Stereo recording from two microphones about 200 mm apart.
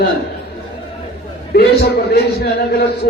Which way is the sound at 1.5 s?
50° left (ahead or behind).